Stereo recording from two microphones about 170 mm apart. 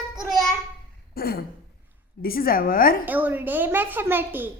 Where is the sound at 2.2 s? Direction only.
60° left (ahead or behind).